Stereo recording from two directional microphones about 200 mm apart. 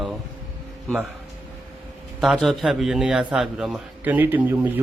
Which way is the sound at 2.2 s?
Centre (ahead or behind).